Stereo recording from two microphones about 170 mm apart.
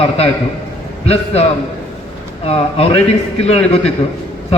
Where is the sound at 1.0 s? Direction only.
40° left (ahead or behind).